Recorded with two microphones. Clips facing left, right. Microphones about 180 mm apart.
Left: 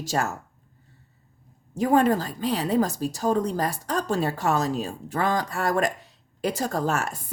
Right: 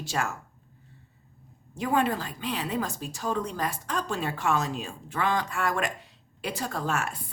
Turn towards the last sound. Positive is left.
turn(degrees=40)  # may be behind; listen again after turning